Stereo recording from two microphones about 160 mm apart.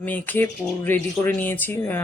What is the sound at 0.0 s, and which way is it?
Speech, 10° left (ahead or behind).